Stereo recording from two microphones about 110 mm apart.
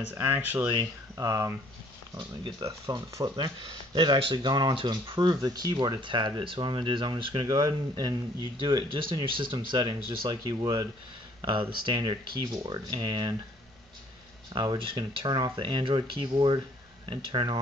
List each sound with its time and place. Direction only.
0.1 s speech: 20° right (ahead or behind)
2.6 s speech: 30° right (ahead or behind)
3.3 s speech: 45° right (ahead or behind)
5.2 s speech: 35° right (ahead or behind); by 7.4 s 50° right (ahead or behind)
7.4 s speech: 35° right (ahead or behind)
14.5 s speech: 40° right (ahead or behind)